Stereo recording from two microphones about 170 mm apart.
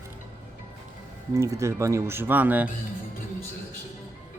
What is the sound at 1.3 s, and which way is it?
Speech, 20° right (ahead or behind).